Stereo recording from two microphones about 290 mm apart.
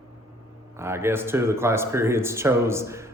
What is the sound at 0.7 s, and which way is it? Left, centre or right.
Speech, centre.